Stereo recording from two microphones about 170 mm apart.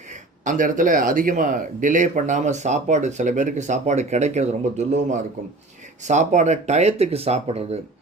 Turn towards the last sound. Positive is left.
turn(degrees=-40)  # may be behind; listen again after turning